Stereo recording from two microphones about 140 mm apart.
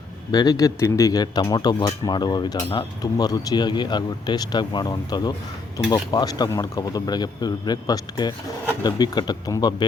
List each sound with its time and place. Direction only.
0.3 s speech: 30° left (ahead or behind)